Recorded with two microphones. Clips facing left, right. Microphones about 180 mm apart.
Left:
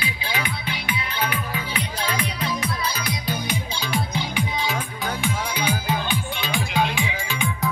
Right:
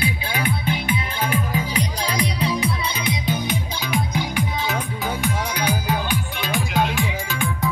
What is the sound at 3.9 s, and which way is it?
Music, 15° right (ahead or behind).